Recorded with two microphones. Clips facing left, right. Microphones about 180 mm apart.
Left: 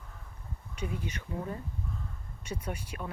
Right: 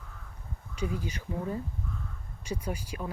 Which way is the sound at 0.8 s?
30° right (ahead or behind).